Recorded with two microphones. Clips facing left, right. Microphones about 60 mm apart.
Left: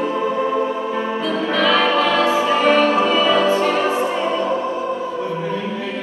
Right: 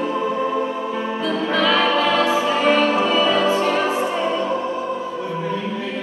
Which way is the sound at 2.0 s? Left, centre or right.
Left.